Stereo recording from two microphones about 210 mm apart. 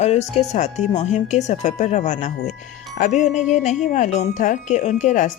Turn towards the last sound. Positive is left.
turn(degrees=35)  # may be behind; listen again after turning